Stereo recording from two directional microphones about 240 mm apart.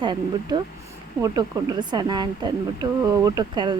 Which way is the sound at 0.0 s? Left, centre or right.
Centre.